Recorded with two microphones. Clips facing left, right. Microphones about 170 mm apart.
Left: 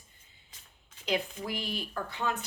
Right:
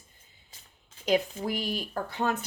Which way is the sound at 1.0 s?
45° right (ahead or behind).